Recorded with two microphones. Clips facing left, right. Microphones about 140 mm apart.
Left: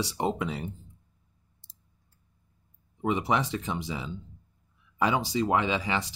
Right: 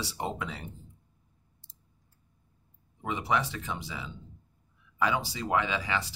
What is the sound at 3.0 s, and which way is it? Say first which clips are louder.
Speech: left 3 dB; 20° left (ahead or behind).